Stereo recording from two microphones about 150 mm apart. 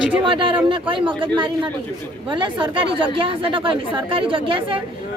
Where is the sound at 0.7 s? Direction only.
35° right (ahead or behind).